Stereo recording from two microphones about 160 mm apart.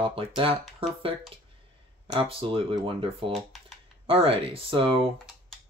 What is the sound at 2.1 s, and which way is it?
Speech, 35° right (ahead or behind).